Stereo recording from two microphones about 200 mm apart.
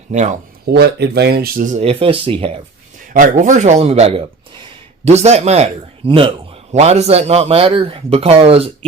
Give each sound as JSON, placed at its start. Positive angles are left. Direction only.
{"t": 0.1, "sound": "speech", "side_deg": -35}
{"t": 0.6, "sound": "speech", "side_deg": -55}
{"t": 3.0, "sound": "speech", "side_deg": -40}